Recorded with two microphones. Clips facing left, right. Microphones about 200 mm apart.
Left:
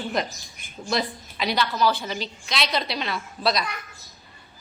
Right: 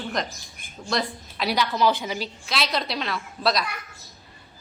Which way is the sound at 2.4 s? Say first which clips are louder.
Left 1 dB; centre (ahead or behind).